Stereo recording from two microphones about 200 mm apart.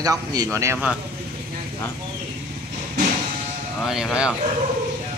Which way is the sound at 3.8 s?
Centre (ahead or behind).